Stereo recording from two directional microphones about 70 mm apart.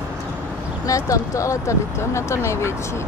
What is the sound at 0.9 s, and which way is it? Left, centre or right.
Speech, left.